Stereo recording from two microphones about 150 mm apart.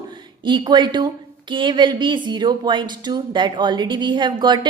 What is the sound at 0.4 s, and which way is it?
A woman's voice, 30° right (ahead or behind).